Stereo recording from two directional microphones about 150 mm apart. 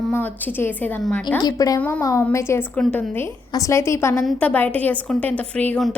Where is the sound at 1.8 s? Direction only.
10° left (ahead or behind).